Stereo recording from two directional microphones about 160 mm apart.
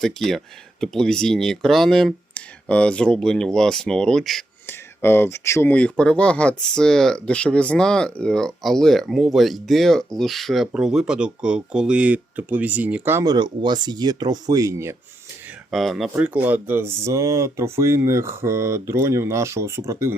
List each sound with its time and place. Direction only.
0.0 s speech: centre (ahead or behind)
4.6 s speech: 15° left (ahead or behind); by 13.2 s 10° right (ahead or behind)
13.2 s speech: 25° right (ahead or behind)
15.7 s speech: centre (ahead or behind)
16.1 s speech: 10° right (ahead or behind)